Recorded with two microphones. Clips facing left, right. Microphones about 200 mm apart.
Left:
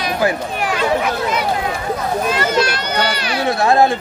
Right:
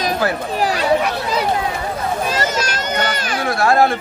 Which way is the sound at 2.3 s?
40° right (ahead or behind).